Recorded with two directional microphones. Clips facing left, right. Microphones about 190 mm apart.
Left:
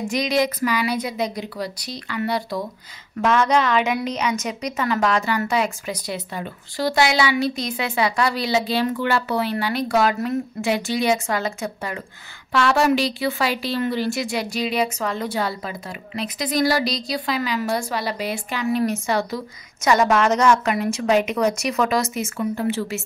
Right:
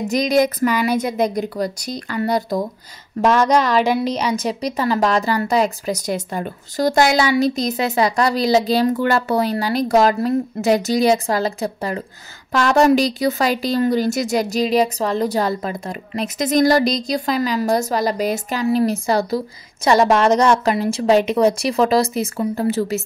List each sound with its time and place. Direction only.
0.0 s a woman's voice: 40° right (ahead or behind)